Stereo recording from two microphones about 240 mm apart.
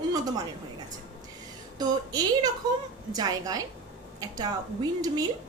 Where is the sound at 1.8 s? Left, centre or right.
Centre.